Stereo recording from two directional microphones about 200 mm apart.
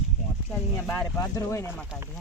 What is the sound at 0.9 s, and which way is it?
Speech, 10° left (ahead or behind).